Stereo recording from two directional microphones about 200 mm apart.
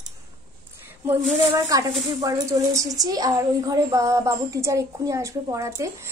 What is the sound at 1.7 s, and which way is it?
A woman's voice, 15° right (ahead or behind).